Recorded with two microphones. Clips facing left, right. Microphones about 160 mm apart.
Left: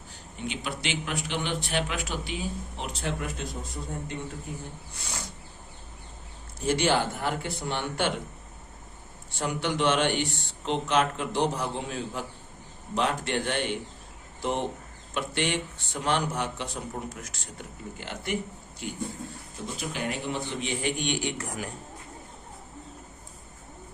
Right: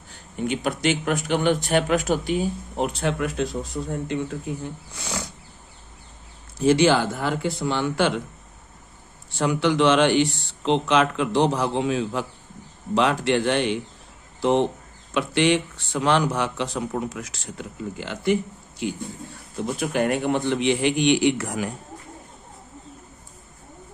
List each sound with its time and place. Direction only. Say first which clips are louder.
0.4 s a man's voice: right 10 dB; 50° right (ahead or behind)
3.1 s a man's voice: right 8 dB; 85° right
6.7 s a man's voice: right 7 dB; 90° right
9.4 s a man's voice: right 7 dB; 90° right
19.6 s a man's voice: right 9 dB; 55° right (ahead or behind); by 21.7 s 90° right